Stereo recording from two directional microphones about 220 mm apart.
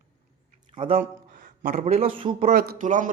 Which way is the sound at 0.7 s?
25° right (ahead or behind).